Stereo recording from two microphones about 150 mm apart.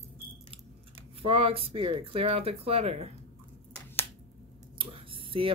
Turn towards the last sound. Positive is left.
turn(degrees=-35)  # may be behind; listen again after turning